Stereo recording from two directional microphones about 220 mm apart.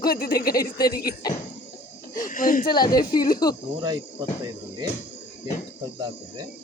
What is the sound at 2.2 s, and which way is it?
Speech, 40° left (ahead or behind).